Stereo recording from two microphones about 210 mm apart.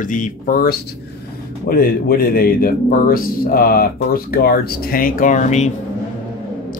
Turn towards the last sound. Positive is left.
turn(degrees=35)  # may be behind; listen again after turning